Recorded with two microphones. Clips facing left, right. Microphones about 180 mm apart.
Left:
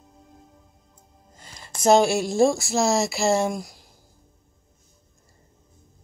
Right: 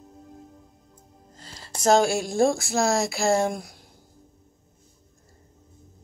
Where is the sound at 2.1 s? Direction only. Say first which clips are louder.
Left 2 dB; 5° left (ahead or behind).